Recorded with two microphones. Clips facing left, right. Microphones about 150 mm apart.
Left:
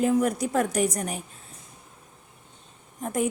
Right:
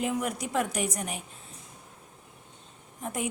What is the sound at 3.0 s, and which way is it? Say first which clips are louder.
Speech: left 7 dB; 40° left (ahead or behind).